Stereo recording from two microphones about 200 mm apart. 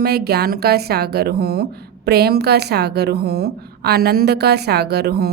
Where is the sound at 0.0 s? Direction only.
50° right (ahead or behind).